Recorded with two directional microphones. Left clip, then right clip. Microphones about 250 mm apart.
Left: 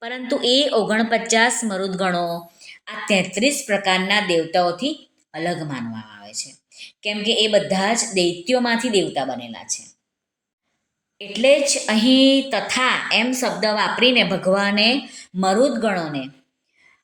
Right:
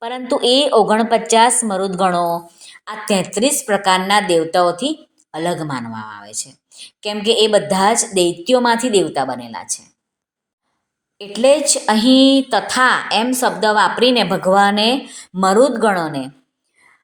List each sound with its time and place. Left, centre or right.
0.0 s a woman's voice: centre
11.2 s a woman's voice: right